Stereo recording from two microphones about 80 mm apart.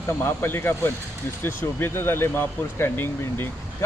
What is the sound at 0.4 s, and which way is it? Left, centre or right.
Speech, left.